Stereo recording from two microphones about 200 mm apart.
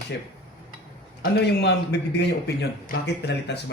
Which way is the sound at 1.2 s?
55° left (ahead or behind).